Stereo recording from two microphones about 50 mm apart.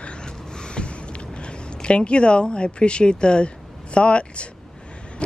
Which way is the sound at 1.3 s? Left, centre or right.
Centre.